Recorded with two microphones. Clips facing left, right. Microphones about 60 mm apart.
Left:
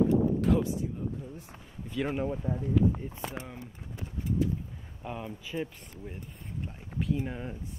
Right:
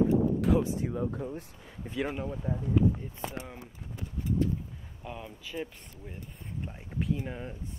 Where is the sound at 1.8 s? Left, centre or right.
Right.